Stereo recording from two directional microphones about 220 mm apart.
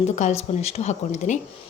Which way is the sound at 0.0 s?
30° left (ahead or behind).